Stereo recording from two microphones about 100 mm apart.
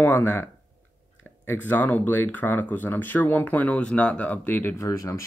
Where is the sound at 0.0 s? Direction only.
20° left (ahead or behind).